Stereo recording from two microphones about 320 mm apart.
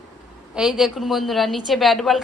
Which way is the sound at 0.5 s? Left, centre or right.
Centre.